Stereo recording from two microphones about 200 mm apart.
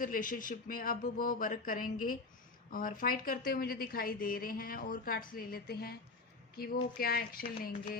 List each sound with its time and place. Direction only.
0.0 s a woman's voice: 45° left (ahead or behind)
7.0 s a woman's voice: 50° left (ahead or behind)